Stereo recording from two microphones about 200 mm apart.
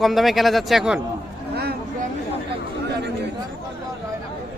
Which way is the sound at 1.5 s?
50° right (ahead or behind).